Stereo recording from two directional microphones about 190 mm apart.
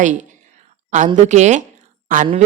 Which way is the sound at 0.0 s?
40° right (ahead or behind).